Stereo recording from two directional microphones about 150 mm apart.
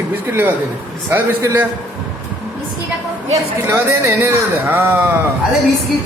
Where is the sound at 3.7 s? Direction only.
20° right (ahead or behind).